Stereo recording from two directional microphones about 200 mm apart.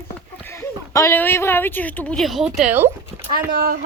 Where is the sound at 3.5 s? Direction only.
50° right (ahead or behind).